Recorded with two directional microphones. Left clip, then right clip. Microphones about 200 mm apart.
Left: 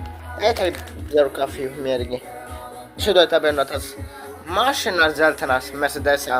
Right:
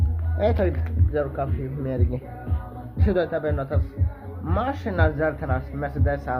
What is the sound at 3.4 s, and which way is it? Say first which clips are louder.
A man's voice: left 8 dB; 35° left (ahead or behind).